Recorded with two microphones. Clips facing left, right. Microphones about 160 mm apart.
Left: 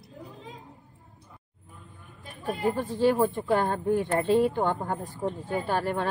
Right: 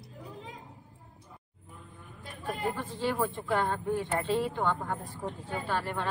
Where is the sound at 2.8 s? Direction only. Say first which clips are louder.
Left 11 dB; 40° left (ahead or behind).